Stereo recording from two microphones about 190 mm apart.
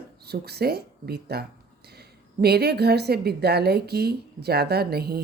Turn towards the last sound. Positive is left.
turn(degrees=-55)  # may be behind; listen again after turning